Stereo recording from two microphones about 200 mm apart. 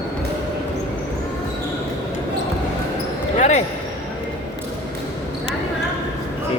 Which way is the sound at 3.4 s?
35° left (ahead or behind).